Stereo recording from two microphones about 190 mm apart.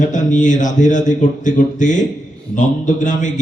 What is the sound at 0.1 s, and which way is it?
A man's voice, 40° left (ahead or behind).